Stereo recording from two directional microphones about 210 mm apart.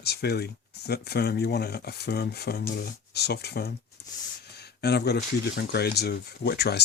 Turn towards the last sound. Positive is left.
turn(degrees=50)  # may be behind; listen again after turning